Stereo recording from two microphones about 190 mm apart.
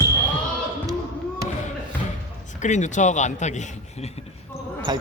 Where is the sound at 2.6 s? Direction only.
40° left (ahead or behind).